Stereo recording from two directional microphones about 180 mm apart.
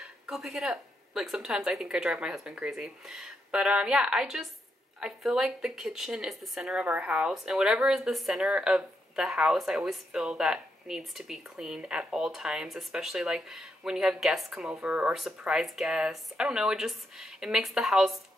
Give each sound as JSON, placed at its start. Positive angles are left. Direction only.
{"t": 0.0, "sound": "speech", "side_deg": 0}